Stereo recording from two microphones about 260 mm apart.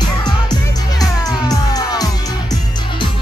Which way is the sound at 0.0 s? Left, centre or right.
Centre.